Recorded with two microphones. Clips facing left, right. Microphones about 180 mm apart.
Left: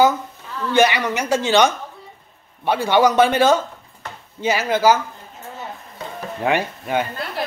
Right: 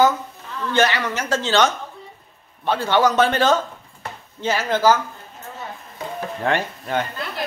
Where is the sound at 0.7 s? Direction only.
15° left (ahead or behind).